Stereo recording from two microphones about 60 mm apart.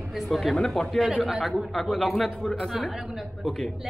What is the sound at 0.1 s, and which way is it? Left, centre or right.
A woman's voice, centre.